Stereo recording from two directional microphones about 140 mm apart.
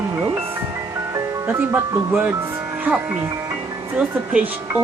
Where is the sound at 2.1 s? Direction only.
15° right (ahead or behind).